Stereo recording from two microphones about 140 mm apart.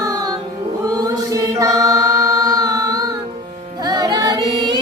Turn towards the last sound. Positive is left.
turn(degrees=-35)  # may be behind; listen again after turning